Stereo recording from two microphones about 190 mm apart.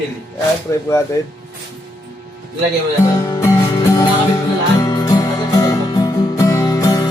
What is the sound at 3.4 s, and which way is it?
Music, 15° left (ahead or behind).